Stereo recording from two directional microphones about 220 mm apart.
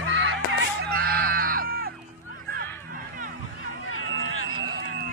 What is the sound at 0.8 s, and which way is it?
Music, 45° right (ahead or behind).